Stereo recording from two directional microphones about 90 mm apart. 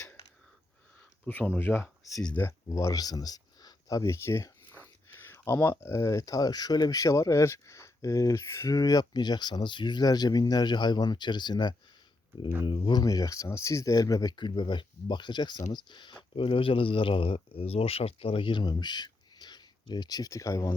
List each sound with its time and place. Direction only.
1.3 s speech: 20° left (ahead or behind)
2.6 s speech: 35° left (ahead or behind); by 11.7 s 55° left (ahead or behind)
12.8 s speech: 50° left (ahead or behind)